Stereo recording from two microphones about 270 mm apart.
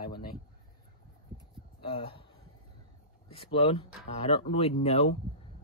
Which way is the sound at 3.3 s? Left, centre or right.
Left.